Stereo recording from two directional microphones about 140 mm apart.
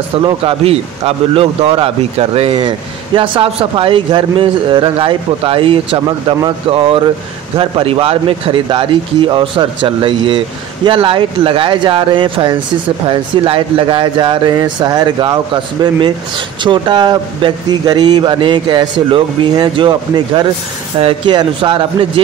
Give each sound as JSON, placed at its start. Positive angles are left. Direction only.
{"t": 0.2, "sound": "a man's voice", "side_deg": -40}